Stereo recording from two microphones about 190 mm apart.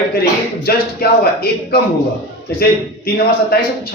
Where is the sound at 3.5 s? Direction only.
55° left (ahead or behind).